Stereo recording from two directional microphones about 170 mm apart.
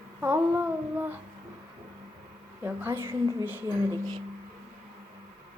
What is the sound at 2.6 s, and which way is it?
Speech, 10° right (ahead or behind).